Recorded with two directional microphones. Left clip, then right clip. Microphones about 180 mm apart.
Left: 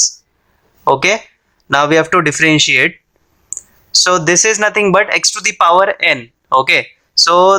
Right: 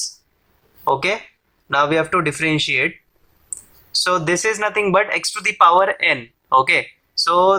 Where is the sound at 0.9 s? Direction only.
35° left (ahead or behind).